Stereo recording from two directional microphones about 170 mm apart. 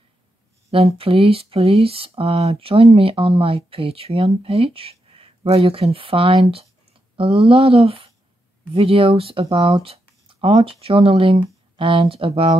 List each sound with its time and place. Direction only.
0.7 s speech: 35° right (ahead or behind)